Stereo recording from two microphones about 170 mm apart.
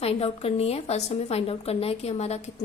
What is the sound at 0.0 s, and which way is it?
A woman's voice, 35° left (ahead or behind).